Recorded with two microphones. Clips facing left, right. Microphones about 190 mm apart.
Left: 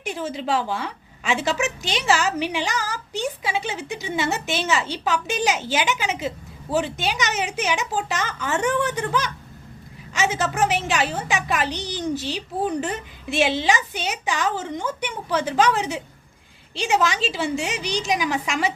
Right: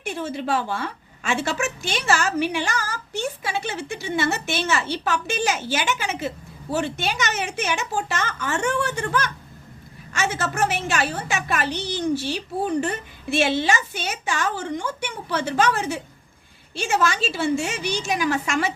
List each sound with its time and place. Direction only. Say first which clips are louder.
0.0 s a woman's voice: even; 15° left (ahead or behind)